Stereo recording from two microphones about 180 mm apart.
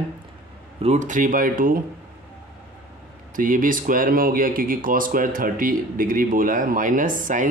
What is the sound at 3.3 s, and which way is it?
Speech, 50° right (ahead or behind).